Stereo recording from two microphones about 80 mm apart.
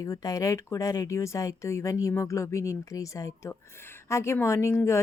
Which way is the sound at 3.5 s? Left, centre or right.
Left.